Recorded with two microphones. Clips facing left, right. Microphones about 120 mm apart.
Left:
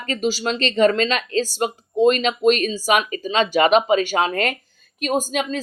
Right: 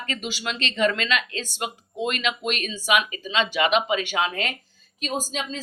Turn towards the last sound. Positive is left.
turn(degrees=55)  # may be behind; listen again after turning